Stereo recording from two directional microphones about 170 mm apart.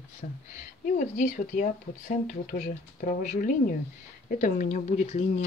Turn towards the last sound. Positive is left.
turn(degrees=45)  # may be behind; listen again after turning